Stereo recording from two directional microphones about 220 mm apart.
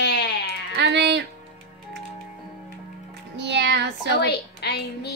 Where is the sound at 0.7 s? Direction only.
50° right (ahead or behind).